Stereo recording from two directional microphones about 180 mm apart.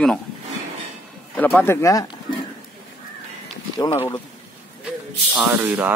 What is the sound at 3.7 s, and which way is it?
Speech, 25° left (ahead or behind).